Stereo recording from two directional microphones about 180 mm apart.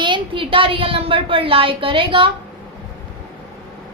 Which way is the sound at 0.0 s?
25° right (ahead or behind).